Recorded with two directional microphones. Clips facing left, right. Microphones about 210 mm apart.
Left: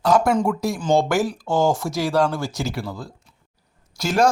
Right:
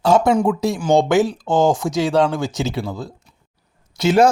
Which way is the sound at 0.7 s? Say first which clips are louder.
Right 2 dB; 10° right (ahead or behind).